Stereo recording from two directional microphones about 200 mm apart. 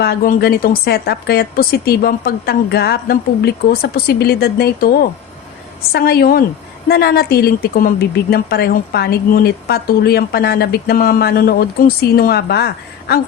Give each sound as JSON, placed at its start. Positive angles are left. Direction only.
{"t": 0.0, "sound": "speech", "side_deg": 50}